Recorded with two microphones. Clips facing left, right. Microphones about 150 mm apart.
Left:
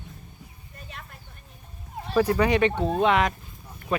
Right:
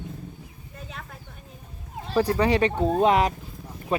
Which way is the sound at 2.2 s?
30° right (ahead or behind).